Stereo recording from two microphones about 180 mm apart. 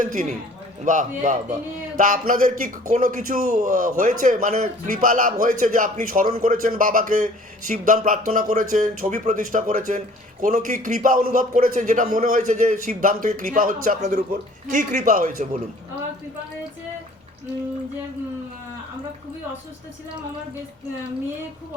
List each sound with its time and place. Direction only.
0.0 s a man's voice: 45° right (ahead or behind)